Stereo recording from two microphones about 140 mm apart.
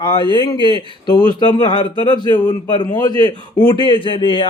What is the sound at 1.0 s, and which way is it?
A man's voice, 30° left (ahead or behind).